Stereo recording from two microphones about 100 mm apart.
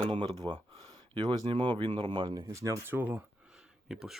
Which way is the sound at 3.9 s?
5° right (ahead or behind).